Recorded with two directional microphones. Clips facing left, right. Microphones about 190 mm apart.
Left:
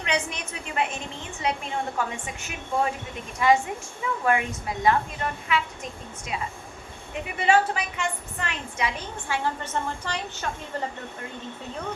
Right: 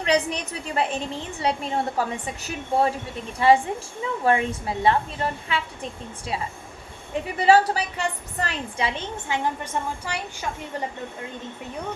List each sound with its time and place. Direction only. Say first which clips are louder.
0.0 s a woman's voice: right 6 dB; 35° right (ahead or behind)
10.1 s a woman's voice: right 1 dB; 10° right (ahead or behind)